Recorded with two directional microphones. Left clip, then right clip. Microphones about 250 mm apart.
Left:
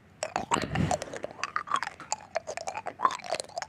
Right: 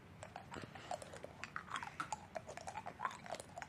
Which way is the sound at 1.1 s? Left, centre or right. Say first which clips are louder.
Left 15 dB; left.